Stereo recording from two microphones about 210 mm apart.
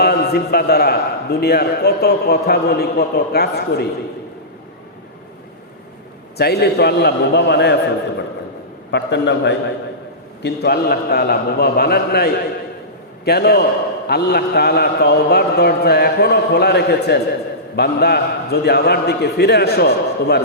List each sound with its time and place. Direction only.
0.0 s a man's voice: 50° left (ahead or behind)
6.3 s a man's voice: 50° left (ahead or behind)
8.9 s a man's voice: 55° left (ahead or behind)